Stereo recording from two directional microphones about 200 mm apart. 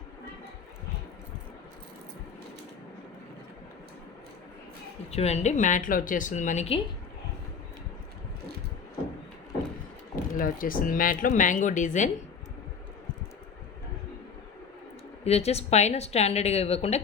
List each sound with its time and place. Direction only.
5.1 s speech: 30° left (ahead or behind)
10.3 s speech: 45° left (ahead or behind)
15.2 s speech: 30° left (ahead or behind)